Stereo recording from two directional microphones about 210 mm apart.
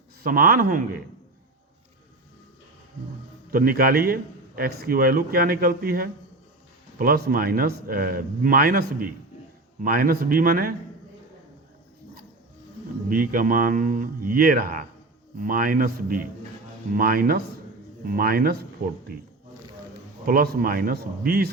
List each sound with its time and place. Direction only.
0.2 s a man's voice: 45° right (ahead or behind)
3.5 s a man's voice: 45° right (ahead or behind)
13.1 s a man's voice: 40° right (ahead or behind)
20.2 s a man's voice: 45° right (ahead or behind)